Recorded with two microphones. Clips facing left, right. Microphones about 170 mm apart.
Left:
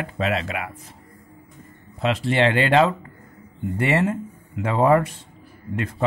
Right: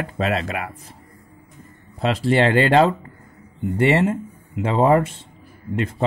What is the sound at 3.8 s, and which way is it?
Speech, 25° right (ahead or behind).